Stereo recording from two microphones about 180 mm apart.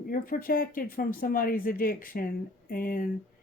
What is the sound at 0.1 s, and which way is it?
Speech, 55° left (ahead or behind).